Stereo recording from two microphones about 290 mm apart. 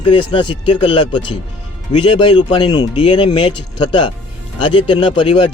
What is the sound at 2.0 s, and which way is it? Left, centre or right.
Speech, centre.